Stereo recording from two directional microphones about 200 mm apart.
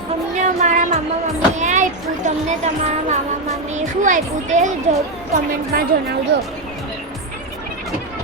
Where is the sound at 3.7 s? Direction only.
40° right (ahead or behind).